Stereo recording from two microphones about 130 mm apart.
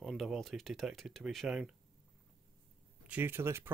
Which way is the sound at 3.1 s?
15° right (ahead or behind).